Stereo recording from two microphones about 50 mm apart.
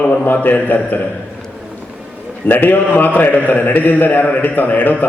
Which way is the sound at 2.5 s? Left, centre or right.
Left.